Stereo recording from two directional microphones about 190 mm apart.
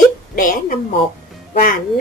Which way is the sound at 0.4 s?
45° left (ahead or behind).